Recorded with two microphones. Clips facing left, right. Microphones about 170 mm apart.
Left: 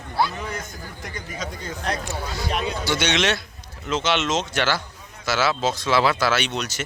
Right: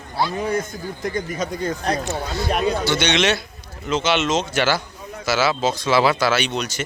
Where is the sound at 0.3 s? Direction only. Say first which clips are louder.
Right 9 dB; 35° right (ahead or behind).